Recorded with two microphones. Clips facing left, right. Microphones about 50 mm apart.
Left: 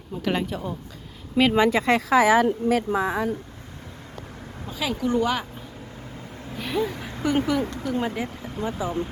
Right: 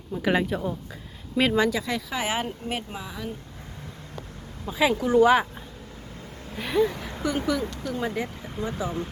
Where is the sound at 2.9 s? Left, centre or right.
Left.